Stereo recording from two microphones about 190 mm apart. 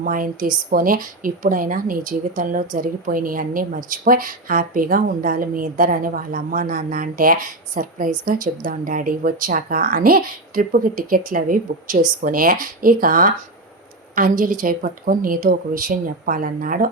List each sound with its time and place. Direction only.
0.0 s a woman's voice: 45° right (ahead or behind)